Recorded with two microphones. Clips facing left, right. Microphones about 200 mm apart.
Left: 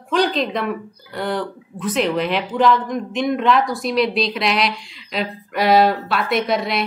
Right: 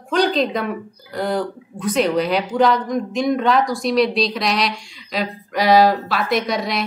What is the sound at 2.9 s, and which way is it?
Speech, centre (ahead or behind).